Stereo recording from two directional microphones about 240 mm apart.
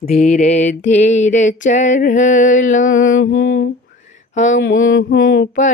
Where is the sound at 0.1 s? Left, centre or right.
Left.